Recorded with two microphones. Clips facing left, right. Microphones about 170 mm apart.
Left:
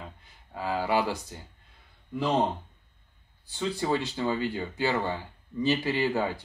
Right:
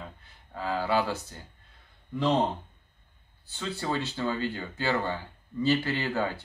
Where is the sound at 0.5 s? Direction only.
10° left (ahead or behind).